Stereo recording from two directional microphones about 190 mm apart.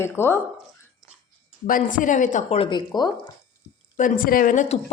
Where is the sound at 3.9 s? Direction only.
45° left (ahead or behind).